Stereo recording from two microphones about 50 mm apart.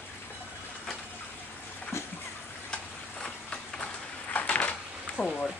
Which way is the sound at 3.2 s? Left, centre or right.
Left.